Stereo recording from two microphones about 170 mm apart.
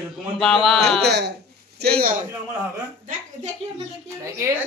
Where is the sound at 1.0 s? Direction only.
85° right.